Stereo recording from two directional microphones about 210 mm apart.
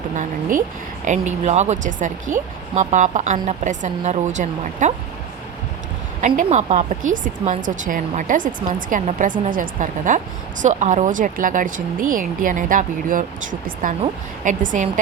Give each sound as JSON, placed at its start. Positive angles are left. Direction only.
{"t": 1.0, "sound": "speech", "side_deg": -35}
{"t": 6.2, "sound": "speech", "side_deg": -35}